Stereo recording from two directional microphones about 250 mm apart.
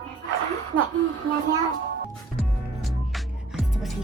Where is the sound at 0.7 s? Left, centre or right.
Right.